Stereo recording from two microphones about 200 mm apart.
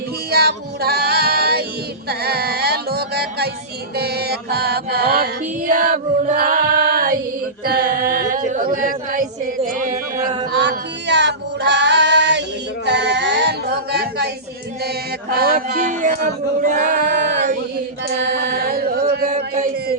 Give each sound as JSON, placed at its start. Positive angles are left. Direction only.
{"t": 0.3, "sound": "music", "side_deg": -50}
{"t": 7.6, "sound": "singing", "side_deg": -45}
{"t": 10.2, "sound": "mantra", "side_deg": -20}
{"t": 10.5, "sound": "female singing", "side_deg": -60}
{"t": 14.8, "sound": "music", "side_deg": -50}
{"t": 18.2, "sound": "chant", "side_deg": -55}
{"t": 19.5, "sound": "music", "side_deg": -40}